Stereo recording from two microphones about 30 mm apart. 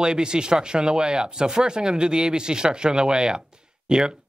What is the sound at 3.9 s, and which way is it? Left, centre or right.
Speech, right.